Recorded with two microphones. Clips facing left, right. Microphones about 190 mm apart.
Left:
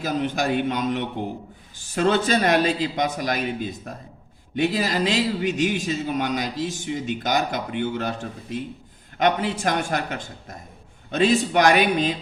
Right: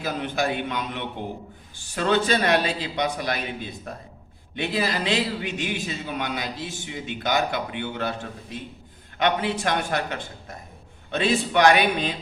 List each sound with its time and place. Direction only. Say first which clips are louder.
0.0 s a man's voice: left 2 dB; 45° left (ahead or behind)